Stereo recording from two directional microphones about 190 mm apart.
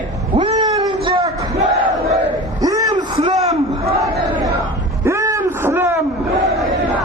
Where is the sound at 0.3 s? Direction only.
25° right (ahead or behind).